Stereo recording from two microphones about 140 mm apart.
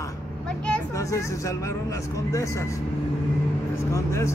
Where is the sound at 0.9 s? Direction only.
20° left (ahead or behind).